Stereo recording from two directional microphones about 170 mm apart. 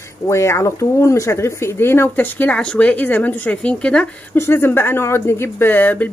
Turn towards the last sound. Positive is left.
turn(degrees=10)  # may be behind; listen again after turning